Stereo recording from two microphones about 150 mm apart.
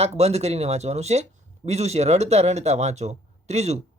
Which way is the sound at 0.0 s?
45° right (ahead or behind).